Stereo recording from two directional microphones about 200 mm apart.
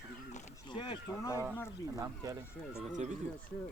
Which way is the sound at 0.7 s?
20° left (ahead or behind).